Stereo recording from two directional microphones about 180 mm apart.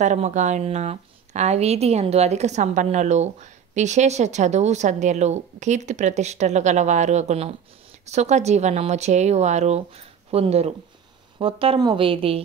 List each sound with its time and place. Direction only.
0.0 s speech: 40° right (ahead or behind)